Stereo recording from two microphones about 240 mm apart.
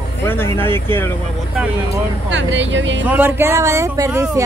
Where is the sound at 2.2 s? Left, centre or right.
Right.